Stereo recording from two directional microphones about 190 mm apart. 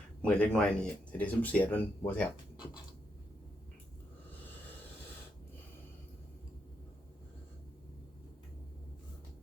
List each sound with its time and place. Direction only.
0.2 s speech: 5° left (ahead or behind)